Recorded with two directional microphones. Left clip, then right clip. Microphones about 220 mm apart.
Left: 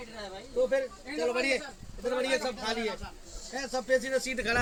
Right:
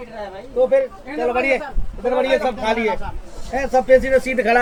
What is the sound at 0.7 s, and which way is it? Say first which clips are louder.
A man's voice: right 12 dB; 15° left (ahead or behind).